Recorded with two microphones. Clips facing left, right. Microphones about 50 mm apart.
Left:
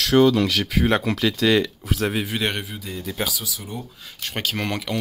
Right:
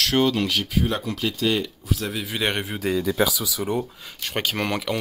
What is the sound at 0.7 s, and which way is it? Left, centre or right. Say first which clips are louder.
Speech: left 4 dB; left.